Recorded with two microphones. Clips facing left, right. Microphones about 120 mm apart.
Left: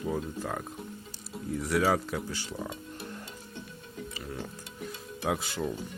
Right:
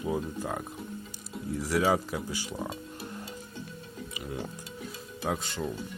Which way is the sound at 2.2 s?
15° right (ahead or behind).